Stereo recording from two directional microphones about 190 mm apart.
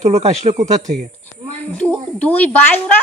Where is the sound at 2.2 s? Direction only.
10° left (ahead or behind).